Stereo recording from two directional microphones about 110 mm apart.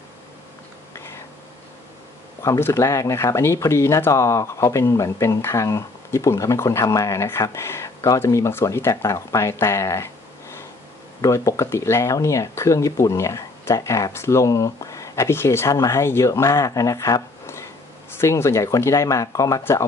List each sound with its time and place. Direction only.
2.4 s speech: 25° left (ahead or behind)
11.1 s speech: 30° left (ahead or behind)